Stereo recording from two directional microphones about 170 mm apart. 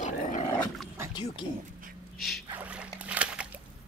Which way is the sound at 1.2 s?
30° left (ahead or behind).